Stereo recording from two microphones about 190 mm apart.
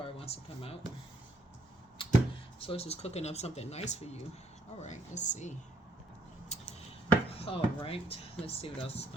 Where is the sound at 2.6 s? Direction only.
30° left (ahead or behind).